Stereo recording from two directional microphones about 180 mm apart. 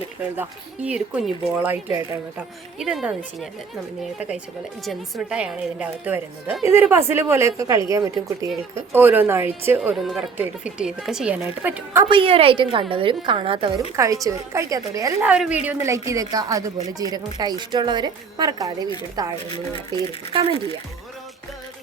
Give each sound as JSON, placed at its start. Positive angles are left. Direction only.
{"t": 0.9, "sound": "a woman's voice", "side_deg": -5}
{"t": 2.7, "sound": "speech", "side_deg": 0}
{"t": 4.9, "sound": "a woman's voice", "side_deg": -5}
{"t": 12.0, "sound": "a woman's voice", "side_deg": -30}
{"t": 13.9, "sound": "a woman's voice", "side_deg": -20}
{"t": 15.2, "sound": "a woman's voice", "side_deg": -5}